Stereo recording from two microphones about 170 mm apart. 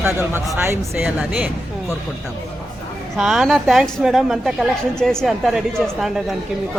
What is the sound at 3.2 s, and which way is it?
A woman's voice, centre (ahead or behind).